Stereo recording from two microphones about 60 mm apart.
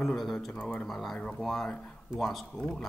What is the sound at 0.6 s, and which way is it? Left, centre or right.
Speech, centre.